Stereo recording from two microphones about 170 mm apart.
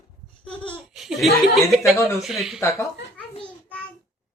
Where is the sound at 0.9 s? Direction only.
Centre (ahead or behind).